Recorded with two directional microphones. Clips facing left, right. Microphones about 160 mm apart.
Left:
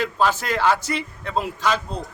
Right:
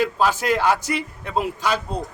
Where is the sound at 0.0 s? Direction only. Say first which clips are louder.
Right 1 dB; 10° right (ahead or behind).